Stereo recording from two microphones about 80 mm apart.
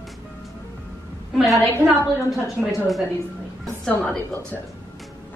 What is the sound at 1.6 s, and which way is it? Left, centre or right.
Speech, left.